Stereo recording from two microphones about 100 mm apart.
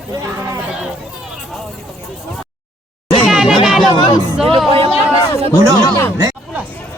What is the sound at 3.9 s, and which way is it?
Speech, 45° left (ahead or behind).